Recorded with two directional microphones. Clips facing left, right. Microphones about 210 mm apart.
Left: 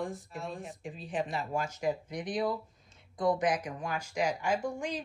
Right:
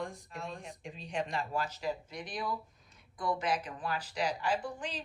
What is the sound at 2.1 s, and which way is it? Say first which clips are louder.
Speech: left 6 dB; 20° left (ahead or behind).